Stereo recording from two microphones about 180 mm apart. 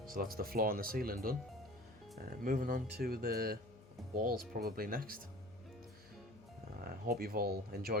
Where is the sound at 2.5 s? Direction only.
50° right (ahead or behind).